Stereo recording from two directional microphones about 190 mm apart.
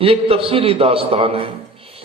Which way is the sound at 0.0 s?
30° right (ahead or behind).